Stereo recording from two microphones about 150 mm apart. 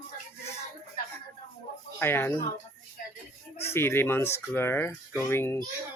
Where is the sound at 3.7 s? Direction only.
15° left (ahead or behind).